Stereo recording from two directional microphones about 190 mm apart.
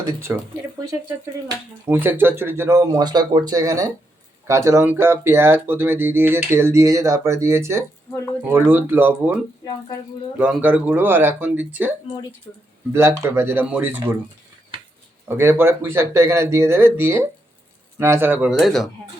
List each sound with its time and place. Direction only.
0.0 s speech: 15° right (ahead or behind)
1.5 s speech: 10° right (ahead or behind)
15.4 s speech: 15° right (ahead or behind)
18.5 s speech: centre (ahead or behind)